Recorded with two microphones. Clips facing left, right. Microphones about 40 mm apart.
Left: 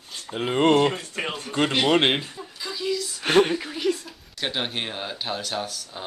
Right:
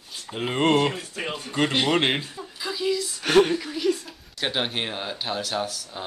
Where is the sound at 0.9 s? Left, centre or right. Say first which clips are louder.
Left 2 dB; left.